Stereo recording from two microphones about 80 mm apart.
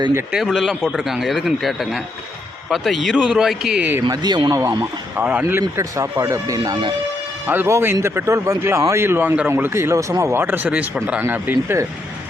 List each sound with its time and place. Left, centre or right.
0.3 s speech: centre
4.1 s speech: right
4.8 s speech: centre
5.4 s speech: right
7.4 s speech: right
9.5 s speech: right
10.4 s speech: right